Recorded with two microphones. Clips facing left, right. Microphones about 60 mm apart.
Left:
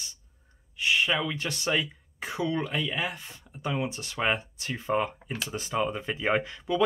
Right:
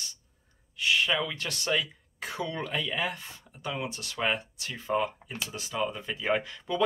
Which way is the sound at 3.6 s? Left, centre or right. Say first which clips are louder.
Left 4 dB; centre.